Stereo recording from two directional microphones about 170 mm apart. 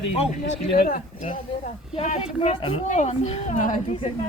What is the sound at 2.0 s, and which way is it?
A woman's voice, 40° left (ahead or behind).